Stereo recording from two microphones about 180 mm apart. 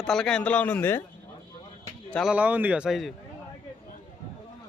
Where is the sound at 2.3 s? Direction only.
10° right (ahead or behind).